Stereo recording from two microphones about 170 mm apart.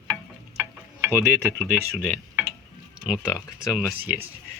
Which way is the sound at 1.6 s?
Centre (ahead or behind).